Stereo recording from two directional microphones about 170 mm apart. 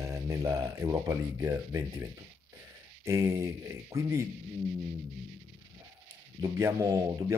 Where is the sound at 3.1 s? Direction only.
15° right (ahead or behind).